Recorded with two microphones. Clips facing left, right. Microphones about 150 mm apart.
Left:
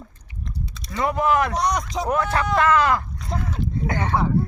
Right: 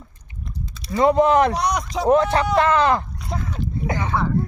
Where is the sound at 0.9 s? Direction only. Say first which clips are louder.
Right 6 dB; 30° right (ahead or behind).